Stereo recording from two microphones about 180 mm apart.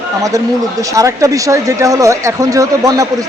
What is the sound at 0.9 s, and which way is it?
A man's voice, 15° right (ahead or behind).